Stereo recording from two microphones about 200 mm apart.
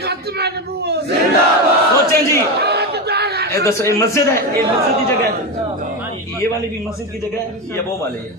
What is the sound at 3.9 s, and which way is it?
Speech, 15° left (ahead or behind).